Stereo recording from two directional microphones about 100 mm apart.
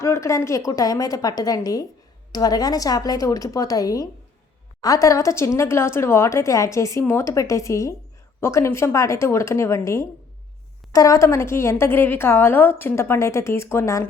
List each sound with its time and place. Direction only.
0.0 s a woman's voice: 30° left (ahead or behind)